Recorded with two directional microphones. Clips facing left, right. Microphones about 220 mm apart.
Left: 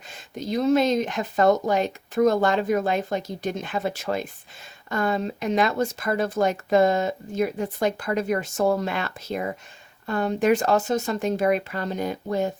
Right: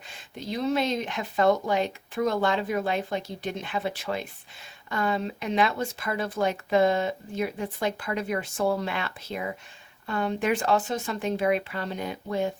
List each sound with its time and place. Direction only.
0.3 s speech: 45° left (ahead or behind)